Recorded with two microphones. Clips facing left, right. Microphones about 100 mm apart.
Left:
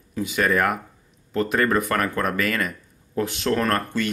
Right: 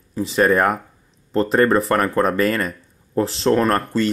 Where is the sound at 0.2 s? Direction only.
35° right (ahead or behind).